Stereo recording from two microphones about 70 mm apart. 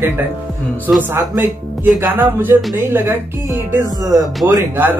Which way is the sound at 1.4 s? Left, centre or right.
Right.